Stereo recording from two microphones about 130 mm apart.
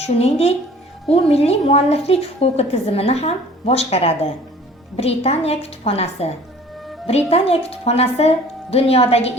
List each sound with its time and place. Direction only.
0.0 s a woman's voice: 50° left (ahead or behind)
7.3 s a woman's voice: 50° left (ahead or behind)